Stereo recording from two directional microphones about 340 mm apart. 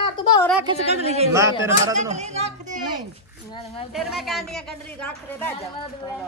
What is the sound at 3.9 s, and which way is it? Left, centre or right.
A woman's voice, centre.